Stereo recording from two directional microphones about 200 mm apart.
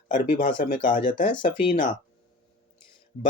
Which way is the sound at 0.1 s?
40° left (ahead or behind).